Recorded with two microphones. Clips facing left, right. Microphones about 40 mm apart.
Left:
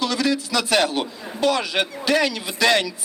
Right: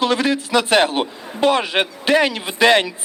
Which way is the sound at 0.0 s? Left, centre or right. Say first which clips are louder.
Right 4 dB; right.